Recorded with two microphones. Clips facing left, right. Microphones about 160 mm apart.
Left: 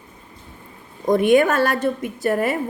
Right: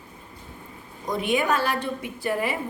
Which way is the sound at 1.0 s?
50° left (ahead or behind).